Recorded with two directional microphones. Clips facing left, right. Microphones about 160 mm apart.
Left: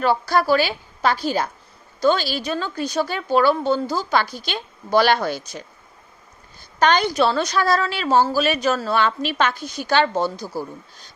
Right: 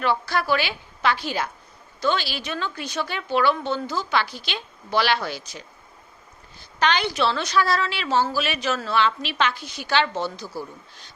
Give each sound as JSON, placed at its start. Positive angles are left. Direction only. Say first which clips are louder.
{"t": 0.0, "sound": "a woman's voice", "louder": "left 5 dB", "side_deg": 40}